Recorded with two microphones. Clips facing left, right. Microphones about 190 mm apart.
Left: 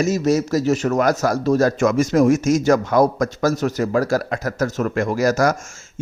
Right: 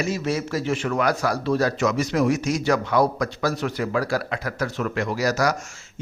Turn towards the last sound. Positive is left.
turn(degrees=50)  # may be behind; listen again after turning